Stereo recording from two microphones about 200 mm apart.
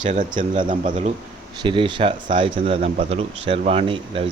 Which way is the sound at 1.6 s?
25° right (ahead or behind).